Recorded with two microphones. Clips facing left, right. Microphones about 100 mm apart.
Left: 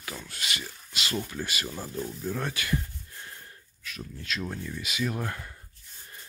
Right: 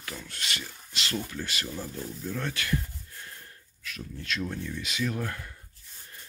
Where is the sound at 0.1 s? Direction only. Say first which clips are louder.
Left 1 dB; 5° left (ahead or behind).